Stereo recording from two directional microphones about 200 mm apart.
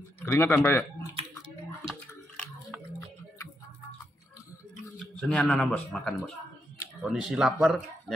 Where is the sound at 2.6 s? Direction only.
10° left (ahead or behind).